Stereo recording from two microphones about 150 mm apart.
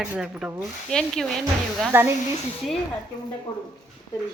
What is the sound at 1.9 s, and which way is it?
Speech, 15° right (ahead or behind).